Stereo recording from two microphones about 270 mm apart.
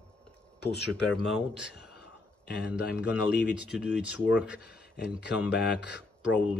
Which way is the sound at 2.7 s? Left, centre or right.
Centre.